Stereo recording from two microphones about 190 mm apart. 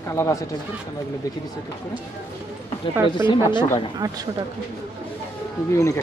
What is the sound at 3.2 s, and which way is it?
Speech, 25° left (ahead or behind).